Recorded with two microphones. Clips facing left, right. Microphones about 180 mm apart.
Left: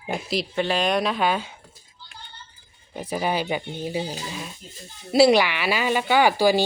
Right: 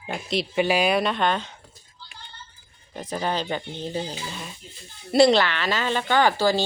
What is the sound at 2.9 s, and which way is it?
Speech, 10° left (ahead or behind).